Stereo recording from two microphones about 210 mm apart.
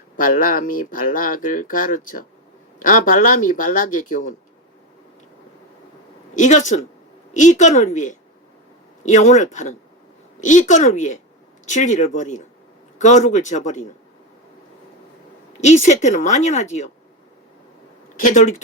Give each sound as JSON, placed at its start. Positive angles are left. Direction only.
{"t": 0.2, "sound": "speech", "side_deg": 40}
{"t": 6.3, "sound": "speech", "side_deg": 35}
{"t": 15.6, "sound": "speech", "side_deg": 35}
{"t": 18.2, "sound": "speech", "side_deg": 35}